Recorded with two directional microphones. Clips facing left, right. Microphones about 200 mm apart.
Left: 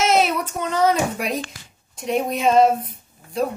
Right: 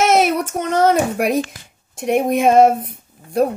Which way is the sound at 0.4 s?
75° right (ahead or behind).